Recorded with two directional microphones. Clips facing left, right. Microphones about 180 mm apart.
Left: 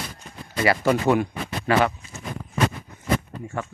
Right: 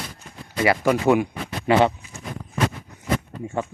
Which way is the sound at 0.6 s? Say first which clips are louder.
Right 1 dB; 15° right (ahead or behind).